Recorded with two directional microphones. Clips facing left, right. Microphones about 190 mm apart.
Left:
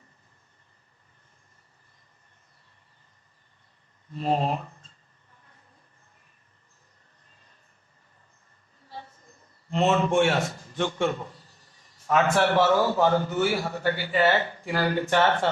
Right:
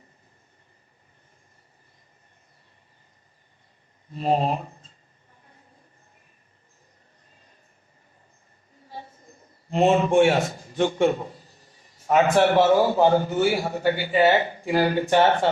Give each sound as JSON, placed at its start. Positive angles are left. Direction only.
{"t": 4.1, "sound": "speech", "side_deg": -15}
{"t": 8.9, "sound": "a sound", "side_deg": -15}
{"t": 9.6, "sound": "speech", "side_deg": -15}